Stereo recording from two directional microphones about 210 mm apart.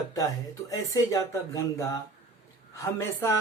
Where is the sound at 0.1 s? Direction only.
15° left (ahead or behind).